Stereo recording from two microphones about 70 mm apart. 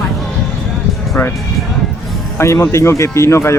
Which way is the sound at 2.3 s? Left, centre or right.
Left.